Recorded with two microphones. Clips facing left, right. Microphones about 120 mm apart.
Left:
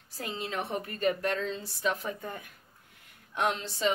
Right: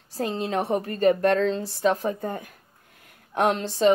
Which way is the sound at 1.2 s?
55° right (ahead or behind).